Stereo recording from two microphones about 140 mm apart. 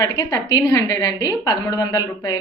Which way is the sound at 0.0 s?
25° left (ahead or behind).